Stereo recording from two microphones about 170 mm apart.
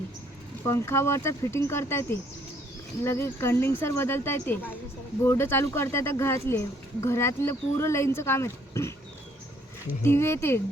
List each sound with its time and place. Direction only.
0.7 s speech: 15° left (ahead or behind)
10.0 s speech: 15° left (ahead or behind)